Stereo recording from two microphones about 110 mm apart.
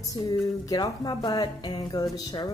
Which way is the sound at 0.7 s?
35° left (ahead or behind).